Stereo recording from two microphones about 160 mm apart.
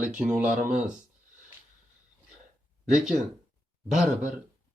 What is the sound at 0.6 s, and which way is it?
Speech, 50° right (ahead or behind).